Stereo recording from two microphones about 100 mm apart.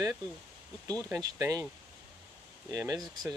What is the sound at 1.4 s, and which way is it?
Speech, 35° right (ahead or behind).